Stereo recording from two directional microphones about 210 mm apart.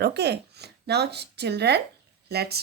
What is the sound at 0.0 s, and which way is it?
Speech, 50° right (ahead or behind).